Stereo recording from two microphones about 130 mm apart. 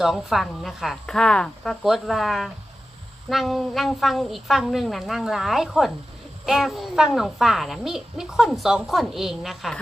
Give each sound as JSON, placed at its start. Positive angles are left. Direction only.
{"t": 0.0, "sound": "a child's voice", "side_deg": 0}